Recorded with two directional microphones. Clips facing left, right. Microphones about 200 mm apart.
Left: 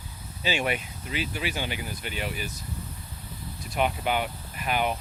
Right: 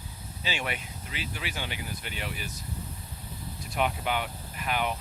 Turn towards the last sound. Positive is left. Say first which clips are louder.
# left 3 dB
turn(degrees=10)  # may be behind; listen again after turning